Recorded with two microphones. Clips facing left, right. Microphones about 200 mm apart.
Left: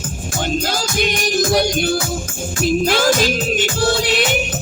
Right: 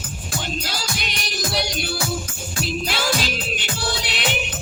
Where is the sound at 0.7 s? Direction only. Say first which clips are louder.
Left 10 dB; 50° left (ahead or behind).